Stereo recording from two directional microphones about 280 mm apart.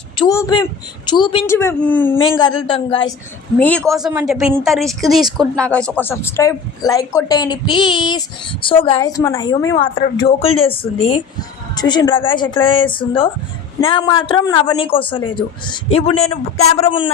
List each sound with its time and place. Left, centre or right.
0.2 s speech: centre
2.6 s speech: centre
3.6 s speech: centre